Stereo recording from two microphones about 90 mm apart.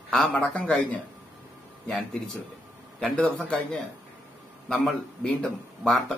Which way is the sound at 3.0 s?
10° left (ahead or behind).